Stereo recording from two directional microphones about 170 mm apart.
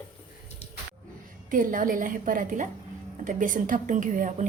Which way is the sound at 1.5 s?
50° right (ahead or behind).